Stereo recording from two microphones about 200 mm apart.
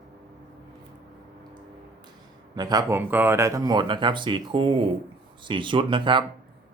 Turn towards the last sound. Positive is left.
turn(degrees=-25)  # may be behind; listen again after turning